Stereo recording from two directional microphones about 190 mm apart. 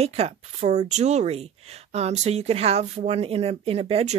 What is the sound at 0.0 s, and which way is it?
Speech, 30° right (ahead or behind).